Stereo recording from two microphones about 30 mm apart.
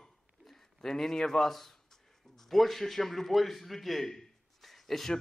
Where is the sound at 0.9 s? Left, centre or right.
Centre.